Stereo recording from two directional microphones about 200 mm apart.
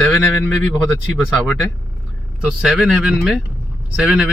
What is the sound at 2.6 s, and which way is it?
Speech, 5° right (ahead or behind).